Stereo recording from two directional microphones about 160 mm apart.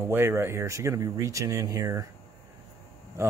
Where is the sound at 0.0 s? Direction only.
15° right (ahead or behind).